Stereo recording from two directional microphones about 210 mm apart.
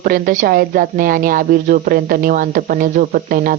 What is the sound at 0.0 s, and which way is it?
A woman's voice, 40° right (ahead or behind).